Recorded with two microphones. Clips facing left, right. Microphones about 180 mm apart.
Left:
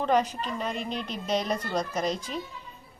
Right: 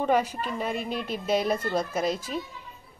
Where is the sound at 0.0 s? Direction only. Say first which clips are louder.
Right 1 dB; 10° right (ahead or behind).